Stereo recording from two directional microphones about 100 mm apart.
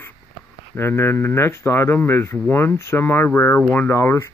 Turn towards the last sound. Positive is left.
turn(degrees=30)  # may be behind; listen again after turning